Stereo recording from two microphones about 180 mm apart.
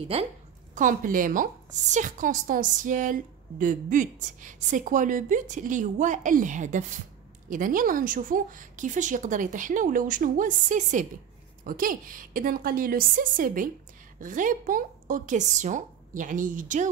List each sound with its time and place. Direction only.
0.1 s a woman's voice: 35° right (ahead or behind)
0.7 s a woman's voice: 50° right (ahead or behind)